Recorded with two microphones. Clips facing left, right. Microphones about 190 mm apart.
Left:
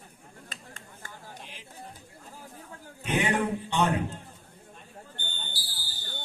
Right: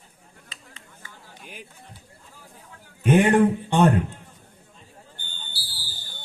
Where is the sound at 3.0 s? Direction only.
50° right (ahead or behind).